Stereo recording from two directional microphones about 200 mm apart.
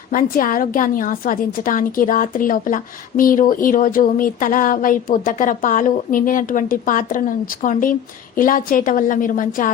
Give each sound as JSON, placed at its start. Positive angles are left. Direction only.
{"t": 0.1, "sound": "a woman's voice", "side_deg": 45}